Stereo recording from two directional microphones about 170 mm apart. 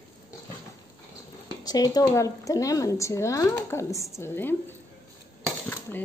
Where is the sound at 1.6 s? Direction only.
20° left (ahead or behind).